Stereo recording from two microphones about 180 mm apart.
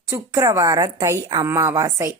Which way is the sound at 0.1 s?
15° right (ahead or behind).